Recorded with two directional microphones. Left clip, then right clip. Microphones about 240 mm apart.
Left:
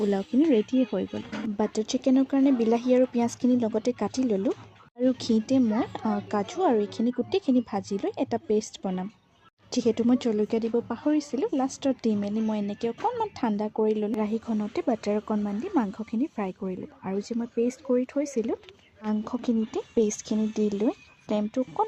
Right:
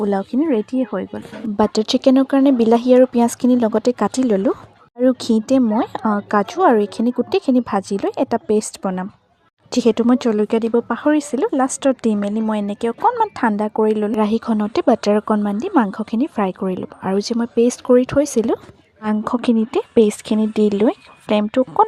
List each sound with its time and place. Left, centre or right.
0.0 s speech: right
1.5 s speech: right
14.2 s speech: right